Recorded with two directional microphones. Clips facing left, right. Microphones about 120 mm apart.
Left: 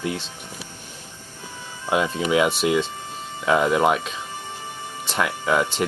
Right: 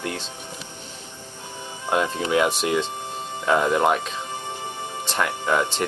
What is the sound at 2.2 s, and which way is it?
Speech, 10° left (ahead or behind).